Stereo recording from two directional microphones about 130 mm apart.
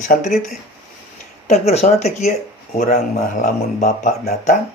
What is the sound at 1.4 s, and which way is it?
Speech, 55° left (ahead or behind).